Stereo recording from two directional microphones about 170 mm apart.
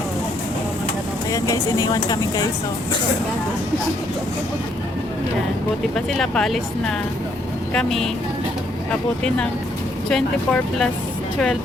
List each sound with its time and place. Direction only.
1.3 s speech: 20° left (ahead or behind)
6.1 s speech: centre (ahead or behind)
7.7 s speech: 5° left (ahead or behind)